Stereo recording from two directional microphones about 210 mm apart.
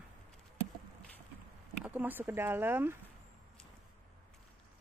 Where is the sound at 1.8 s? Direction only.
10° right (ahead or behind).